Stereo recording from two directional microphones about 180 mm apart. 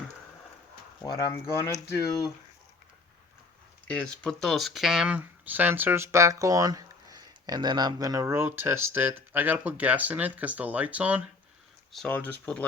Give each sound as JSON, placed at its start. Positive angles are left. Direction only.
{"t": 1.0, "sound": "speech", "side_deg": 20}
{"t": 3.8, "sound": "speech", "side_deg": 5}
{"t": 11.9, "sound": "speech", "side_deg": 5}